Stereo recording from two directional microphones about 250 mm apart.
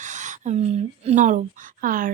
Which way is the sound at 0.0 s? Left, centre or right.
Right.